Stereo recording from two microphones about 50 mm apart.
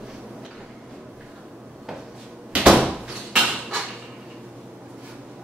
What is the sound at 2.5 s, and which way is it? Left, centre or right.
Door, centre.